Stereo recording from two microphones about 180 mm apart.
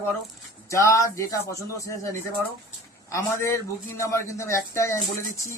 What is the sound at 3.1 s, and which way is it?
A man's voice, 15° left (ahead or behind).